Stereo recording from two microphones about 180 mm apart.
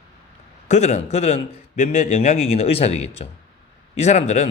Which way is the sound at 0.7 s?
40° left (ahead or behind).